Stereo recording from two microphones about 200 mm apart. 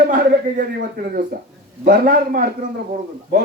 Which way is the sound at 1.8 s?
45° right (ahead or behind).